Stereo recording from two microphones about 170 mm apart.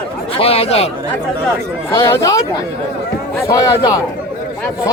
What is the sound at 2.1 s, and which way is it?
Speech, 20° left (ahead or behind).